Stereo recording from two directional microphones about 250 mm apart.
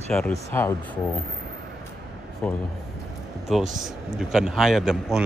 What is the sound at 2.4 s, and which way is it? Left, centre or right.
Speech, centre.